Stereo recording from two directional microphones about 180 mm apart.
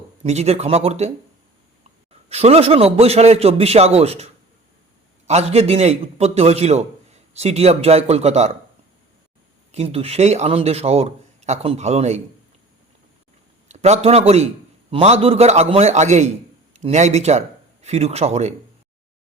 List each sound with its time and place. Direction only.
0.2 s a man's voice: 35° right (ahead or behind)
2.3 s a man's voice: 35° right (ahead or behind)
9.7 s a man's voice: 35° right (ahead or behind)
13.7 s a man's voice: 40° right (ahead or behind)